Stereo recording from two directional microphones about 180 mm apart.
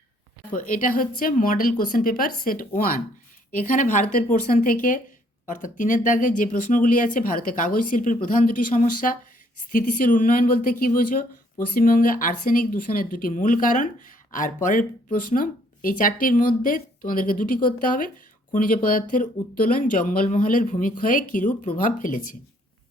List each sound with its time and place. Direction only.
0.5 s speech: 50° left (ahead or behind)